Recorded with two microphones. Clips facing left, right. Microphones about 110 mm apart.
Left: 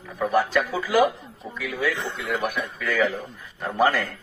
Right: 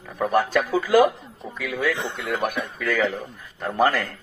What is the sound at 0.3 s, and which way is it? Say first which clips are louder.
Speech: right 1 dB; 50° right (ahead or behind).